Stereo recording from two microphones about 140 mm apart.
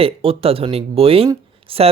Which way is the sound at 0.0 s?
40° right (ahead or behind).